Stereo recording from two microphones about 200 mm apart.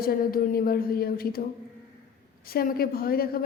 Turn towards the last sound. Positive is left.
turn(degrees=50)  # may be behind; listen again after turning